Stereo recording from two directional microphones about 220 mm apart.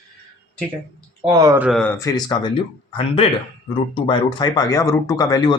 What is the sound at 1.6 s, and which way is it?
Speech, centre (ahead or behind).